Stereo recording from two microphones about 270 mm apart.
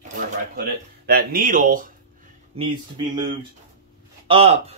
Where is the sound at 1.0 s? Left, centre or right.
Right.